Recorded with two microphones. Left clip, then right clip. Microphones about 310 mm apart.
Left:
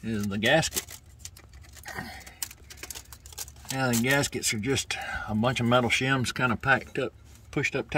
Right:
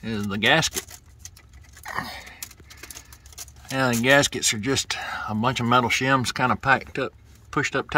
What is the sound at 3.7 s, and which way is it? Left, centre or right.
Speech, right.